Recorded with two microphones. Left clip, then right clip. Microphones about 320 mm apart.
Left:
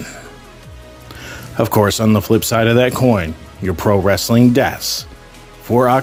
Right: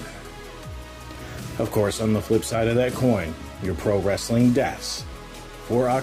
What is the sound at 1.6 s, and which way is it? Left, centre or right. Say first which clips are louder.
Speech: left 9 dB; left.